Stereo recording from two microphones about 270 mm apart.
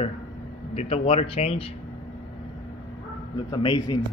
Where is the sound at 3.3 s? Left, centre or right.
Centre.